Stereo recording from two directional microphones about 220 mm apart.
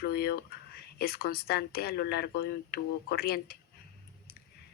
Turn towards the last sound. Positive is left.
turn(degrees=45)  # may be behind; listen again after turning